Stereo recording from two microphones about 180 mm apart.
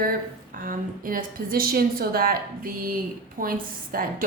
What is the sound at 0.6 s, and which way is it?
A woman's voice, 50° right (ahead or behind).